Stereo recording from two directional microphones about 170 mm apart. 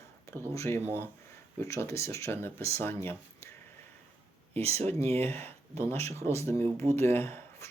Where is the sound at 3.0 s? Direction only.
15° left (ahead or behind).